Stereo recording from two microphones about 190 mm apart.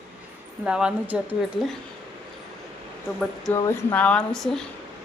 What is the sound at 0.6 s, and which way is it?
A woman's voice, 5° right (ahead or behind).